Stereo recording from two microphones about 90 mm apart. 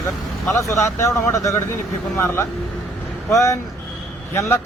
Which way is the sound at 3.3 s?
35° left (ahead or behind).